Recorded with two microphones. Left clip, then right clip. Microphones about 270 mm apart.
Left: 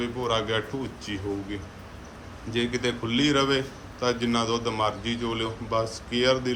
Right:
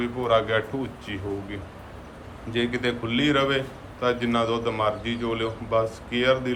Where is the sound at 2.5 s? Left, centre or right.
Centre.